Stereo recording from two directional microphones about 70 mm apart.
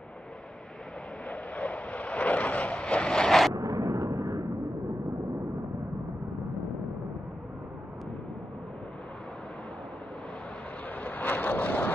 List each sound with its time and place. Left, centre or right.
1.3 s vehicle: centre
3.5 s a sound: right
11.0 s vehicle: left